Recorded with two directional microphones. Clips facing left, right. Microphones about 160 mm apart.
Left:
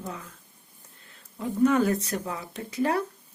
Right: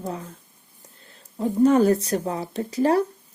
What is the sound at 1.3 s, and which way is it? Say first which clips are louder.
Speech: right 5 dB; 35° right (ahead or behind).